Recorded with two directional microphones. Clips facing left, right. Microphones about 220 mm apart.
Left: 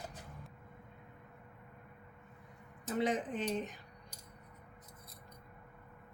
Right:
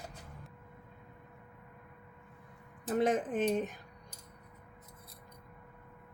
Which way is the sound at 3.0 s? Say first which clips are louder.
Right 5 dB; 45° right (ahead or behind).